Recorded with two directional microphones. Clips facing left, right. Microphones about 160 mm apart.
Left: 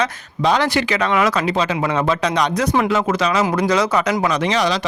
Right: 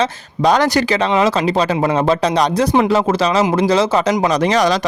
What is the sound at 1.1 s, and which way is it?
Speech, 25° right (ahead or behind).